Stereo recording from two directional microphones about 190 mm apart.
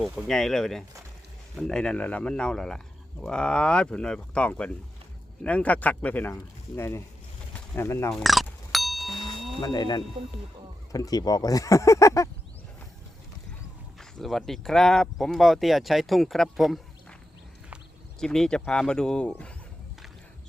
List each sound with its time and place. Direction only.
0.0 s speech: centre (ahead or behind)
8.1 s a sound: centre (ahead or behind)
9.1 s a sound: 25° left (ahead or behind)
9.6 s speech: 20° left (ahead or behind)
14.0 s speech: centre (ahead or behind)
18.2 s speech: 5° left (ahead or behind)